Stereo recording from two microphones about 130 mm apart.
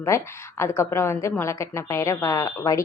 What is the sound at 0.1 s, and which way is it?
Speech, 20° left (ahead or behind).